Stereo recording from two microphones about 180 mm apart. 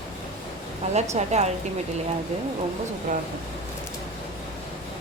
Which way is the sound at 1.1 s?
40° right (ahead or behind).